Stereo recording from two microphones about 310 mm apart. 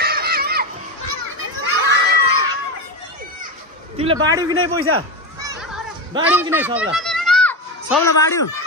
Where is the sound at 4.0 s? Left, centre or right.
Centre.